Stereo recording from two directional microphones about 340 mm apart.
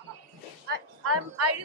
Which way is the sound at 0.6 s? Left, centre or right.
Right.